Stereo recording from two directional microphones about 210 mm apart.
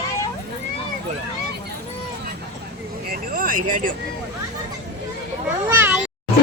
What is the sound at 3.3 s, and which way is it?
Speech, 40° right (ahead or behind).